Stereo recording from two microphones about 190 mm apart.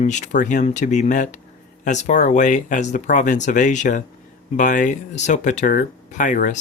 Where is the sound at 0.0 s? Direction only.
40° left (ahead or behind).